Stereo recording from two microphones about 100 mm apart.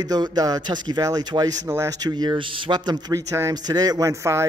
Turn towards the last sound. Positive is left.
turn(degrees=-30)  # may be behind; listen again after turning